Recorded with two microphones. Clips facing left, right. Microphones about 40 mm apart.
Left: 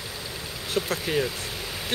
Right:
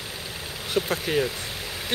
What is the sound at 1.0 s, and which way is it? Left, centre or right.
Speech, centre.